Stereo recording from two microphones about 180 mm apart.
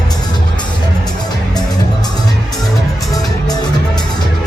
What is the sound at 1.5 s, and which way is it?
Music, 20° left (ahead or behind).